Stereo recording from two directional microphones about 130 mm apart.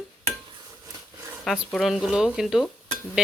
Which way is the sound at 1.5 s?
Centre (ahead or behind).